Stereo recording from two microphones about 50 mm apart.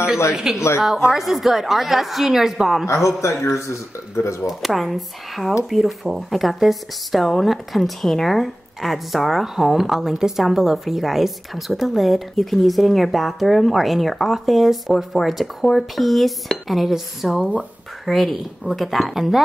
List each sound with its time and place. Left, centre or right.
0.3 s speech: centre
3.2 s a man's voice: left
4.5 s speech: centre